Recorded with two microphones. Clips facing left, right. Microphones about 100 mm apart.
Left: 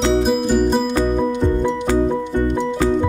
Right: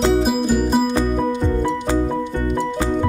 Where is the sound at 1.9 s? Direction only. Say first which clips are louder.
Left 3 dB; 20° left (ahead or behind).